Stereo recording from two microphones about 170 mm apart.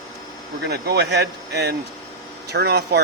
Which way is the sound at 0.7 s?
75° right (ahead or behind).